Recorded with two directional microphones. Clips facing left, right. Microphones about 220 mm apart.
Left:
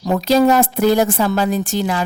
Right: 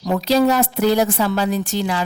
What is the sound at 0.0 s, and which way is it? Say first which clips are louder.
A woman's voice: left 2 dB; 50° left (ahead or behind).